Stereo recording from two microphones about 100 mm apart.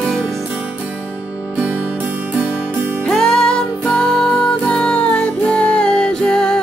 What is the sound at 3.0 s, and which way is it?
Music, 5° left (ahead or behind).